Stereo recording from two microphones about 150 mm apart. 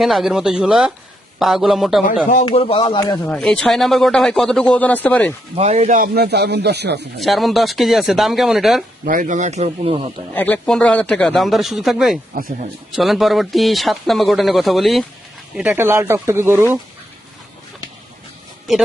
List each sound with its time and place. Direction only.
0.0 s speech: centre (ahead or behind)
2.4 s speech: 35° left (ahead or behind)
3.2 s speech: 5° left (ahead or behind)
5.5 s a man's voice: 45° right (ahead or behind); by 6.9 s 90° right
7.2 s speech: centre (ahead or behind)
9.0 s speech: 60° right (ahead or behind); by 10.1 s 40° right (ahead or behind)
10.3 s speech: 10° left (ahead or behind); by 16.7 s 15° right (ahead or behind)